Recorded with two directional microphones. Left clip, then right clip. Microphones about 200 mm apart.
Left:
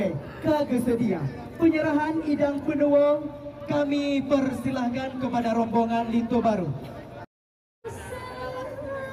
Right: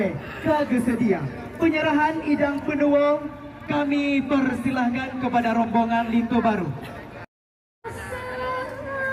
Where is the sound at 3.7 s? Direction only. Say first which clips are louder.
Right 2 dB; 90° left.